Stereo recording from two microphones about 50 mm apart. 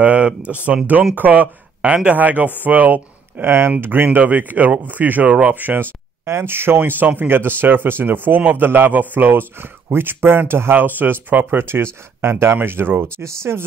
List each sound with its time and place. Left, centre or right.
0.0 s a sound: right
1.1 s speech: right
3.4 s speech: right
6.2 s speech: right
11.6 s speech: right
13.2 s speech: right